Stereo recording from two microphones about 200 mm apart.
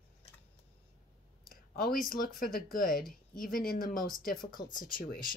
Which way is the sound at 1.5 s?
45° left (ahead or behind).